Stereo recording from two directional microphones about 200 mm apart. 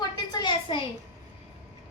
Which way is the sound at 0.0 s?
20° left (ahead or behind).